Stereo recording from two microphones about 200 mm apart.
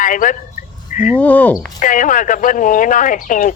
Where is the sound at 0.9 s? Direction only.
40° left (ahead or behind).